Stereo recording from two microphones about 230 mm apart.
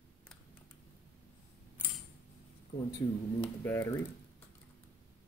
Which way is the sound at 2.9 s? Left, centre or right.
Centre.